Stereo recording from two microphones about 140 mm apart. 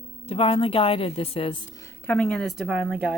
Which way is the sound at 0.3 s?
40° left (ahead or behind).